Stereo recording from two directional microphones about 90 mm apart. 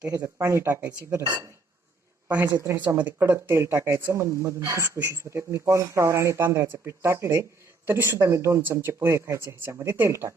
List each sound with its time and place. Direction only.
0.3 s speech: 30° right (ahead or behind)
2.2 s speech: 20° right (ahead or behind)